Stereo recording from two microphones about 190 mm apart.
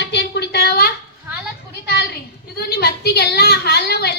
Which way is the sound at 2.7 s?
55° left (ahead or behind).